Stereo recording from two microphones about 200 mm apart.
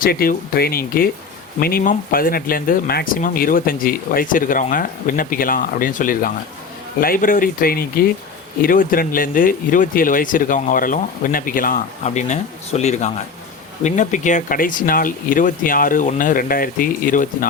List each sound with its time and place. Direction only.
0.0 s speech: 45° left (ahead or behind)